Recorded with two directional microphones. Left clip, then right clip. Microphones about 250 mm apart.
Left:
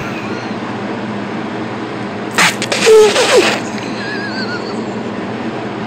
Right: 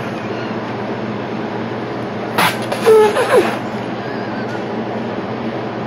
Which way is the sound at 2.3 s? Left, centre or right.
Left.